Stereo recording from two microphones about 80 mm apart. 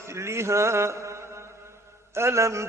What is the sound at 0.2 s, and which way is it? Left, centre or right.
Mantra, right.